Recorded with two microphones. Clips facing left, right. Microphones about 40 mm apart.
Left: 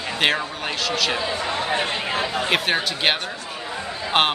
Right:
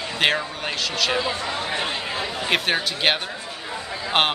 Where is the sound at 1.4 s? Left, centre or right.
Left.